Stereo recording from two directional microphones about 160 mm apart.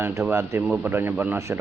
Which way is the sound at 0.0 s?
15° right (ahead or behind).